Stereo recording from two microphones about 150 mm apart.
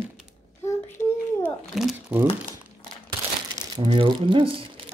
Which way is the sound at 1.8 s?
5° right (ahead or behind).